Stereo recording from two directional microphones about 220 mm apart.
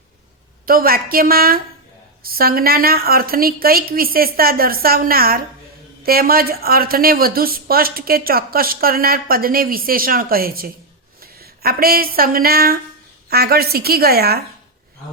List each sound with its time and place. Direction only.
0.6 s a woman's voice: 40° right (ahead or behind)